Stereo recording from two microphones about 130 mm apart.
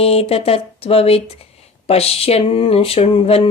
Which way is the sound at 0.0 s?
50° left (ahead or behind).